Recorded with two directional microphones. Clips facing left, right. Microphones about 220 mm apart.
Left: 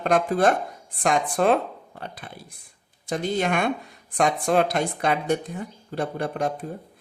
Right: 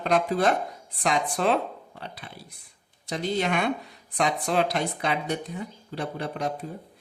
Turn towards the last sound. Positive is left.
turn(degrees=50)  # may be behind; listen again after turning